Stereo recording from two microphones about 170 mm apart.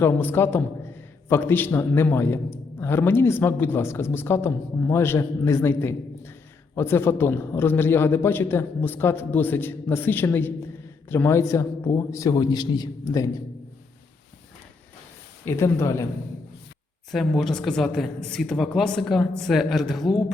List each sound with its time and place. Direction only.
0.0 s a man's voice: 10° left (ahead or behind)
15.4 s a man's voice: 15° left (ahead or behind)
17.1 s a woman's voice: centre (ahead or behind)